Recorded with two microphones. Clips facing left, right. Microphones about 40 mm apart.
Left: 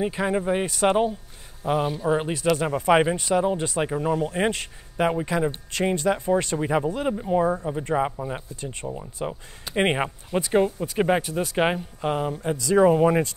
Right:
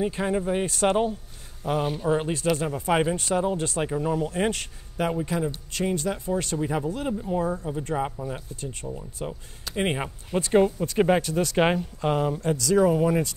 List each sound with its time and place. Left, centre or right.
0.0 s speech: centre
2.5 s speech: left
10.5 s speech: centre
12.5 s speech: left